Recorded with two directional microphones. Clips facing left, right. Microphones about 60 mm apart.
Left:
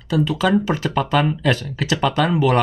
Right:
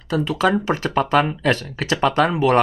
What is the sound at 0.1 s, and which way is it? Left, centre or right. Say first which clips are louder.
Speech: left 1 dB; right.